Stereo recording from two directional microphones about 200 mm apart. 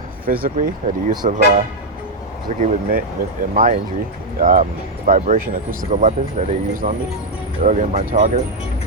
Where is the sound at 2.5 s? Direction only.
35° right (ahead or behind).